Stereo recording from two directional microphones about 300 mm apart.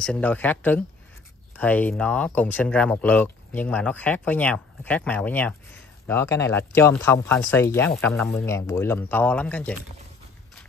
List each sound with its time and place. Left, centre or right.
0.0 s speech: centre